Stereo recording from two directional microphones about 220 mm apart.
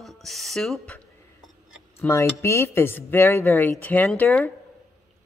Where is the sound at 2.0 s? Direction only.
10° left (ahead or behind).